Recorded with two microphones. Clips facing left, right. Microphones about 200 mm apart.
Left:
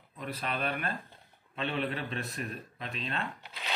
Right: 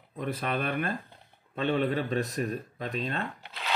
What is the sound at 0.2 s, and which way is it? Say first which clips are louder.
Speech: right 4 dB; 50° right (ahead or behind).